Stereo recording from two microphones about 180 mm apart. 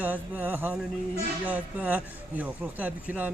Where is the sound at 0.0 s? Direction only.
10° right (ahead or behind).